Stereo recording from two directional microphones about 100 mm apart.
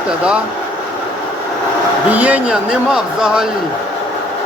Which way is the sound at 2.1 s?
15° right (ahead or behind).